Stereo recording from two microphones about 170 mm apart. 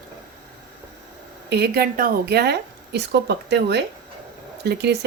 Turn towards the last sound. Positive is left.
turn(degrees=-75)  # may be behind; listen again after turning